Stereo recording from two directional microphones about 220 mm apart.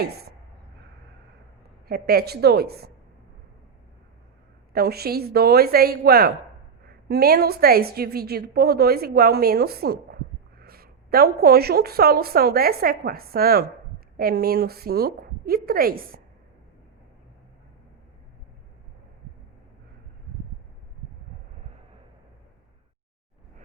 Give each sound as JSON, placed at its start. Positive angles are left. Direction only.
{"t": 0.0, "sound": "speech", "side_deg": -45}
{"t": 1.9, "sound": "a woman's voice", "side_deg": -45}
{"t": 4.7, "sound": "a woman's voice", "side_deg": -45}